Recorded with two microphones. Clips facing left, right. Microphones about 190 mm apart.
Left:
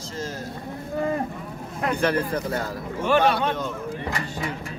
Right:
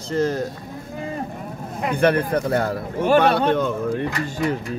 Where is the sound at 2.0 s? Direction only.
60° right (ahead or behind).